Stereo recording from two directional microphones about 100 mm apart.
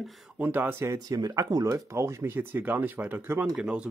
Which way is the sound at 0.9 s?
40° right (ahead or behind).